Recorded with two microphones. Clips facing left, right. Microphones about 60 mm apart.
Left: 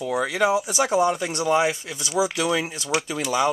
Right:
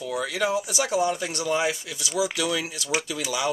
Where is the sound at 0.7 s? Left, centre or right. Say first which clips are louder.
Left 4 dB; left.